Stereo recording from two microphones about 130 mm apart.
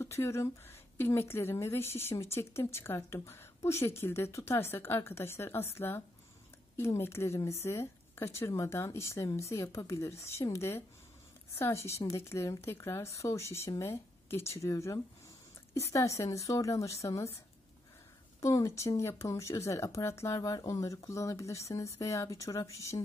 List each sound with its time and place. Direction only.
0.0 s a woman's voice: 20° left (ahead or behind)
18.4 s a woman's voice: 25° left (ahead or behind)